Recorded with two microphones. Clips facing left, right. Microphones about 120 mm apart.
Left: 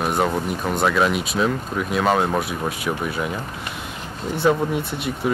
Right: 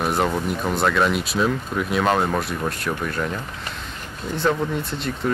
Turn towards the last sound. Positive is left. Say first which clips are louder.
# left 2 dB
turn(degrees=5)  # may be behind; listen again after turning